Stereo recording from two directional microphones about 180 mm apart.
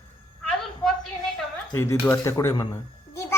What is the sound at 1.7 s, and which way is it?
Speech, 15° left (ahead or behind).